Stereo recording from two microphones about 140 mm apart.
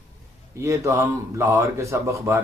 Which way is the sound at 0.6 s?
20° right (ahead or behind).